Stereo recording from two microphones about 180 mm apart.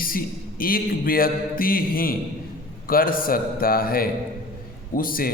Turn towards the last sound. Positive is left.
turn(degrees=55)  # may be behind; listen again after turning